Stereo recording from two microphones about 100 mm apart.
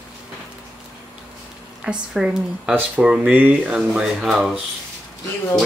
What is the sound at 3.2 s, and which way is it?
Speech, 20° right (ahead or behind).